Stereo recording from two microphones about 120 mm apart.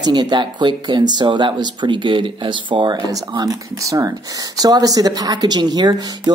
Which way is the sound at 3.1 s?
30° right (ahead or behind).